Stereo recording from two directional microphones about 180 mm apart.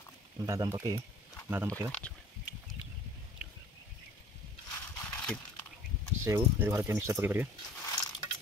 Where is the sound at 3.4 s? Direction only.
5° right (ahead or behind).